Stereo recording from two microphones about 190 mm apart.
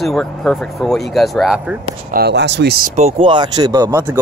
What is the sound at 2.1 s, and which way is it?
Speech, 60° right (ahead or behind).